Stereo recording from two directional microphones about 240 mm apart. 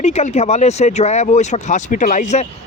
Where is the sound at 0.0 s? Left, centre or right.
Left.